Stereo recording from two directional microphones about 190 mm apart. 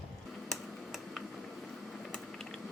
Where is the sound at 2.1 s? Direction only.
5° left (ahead or behind).